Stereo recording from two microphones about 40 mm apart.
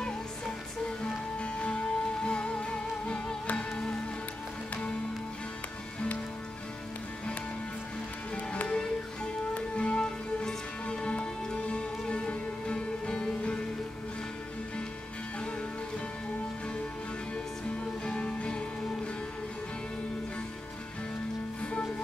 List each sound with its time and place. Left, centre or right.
1.0 s music: left
8.6 s music: left
18.0 s music: left